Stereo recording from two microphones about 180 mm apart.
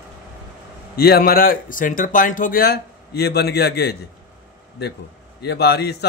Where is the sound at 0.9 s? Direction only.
60° left (ahead or behind).